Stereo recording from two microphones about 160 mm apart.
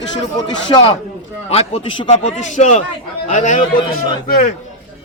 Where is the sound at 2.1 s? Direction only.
45° left (ahead or behind).